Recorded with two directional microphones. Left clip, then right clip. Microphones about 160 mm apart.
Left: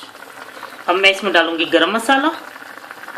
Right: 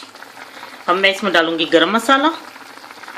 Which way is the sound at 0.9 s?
60° right (ahead or behind).